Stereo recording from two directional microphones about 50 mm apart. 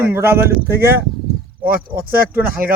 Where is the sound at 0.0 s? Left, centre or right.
Right.